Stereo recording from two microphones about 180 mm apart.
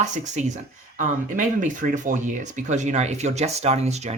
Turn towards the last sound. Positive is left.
turn(degrees=-35)  # may be behind; listen again after turning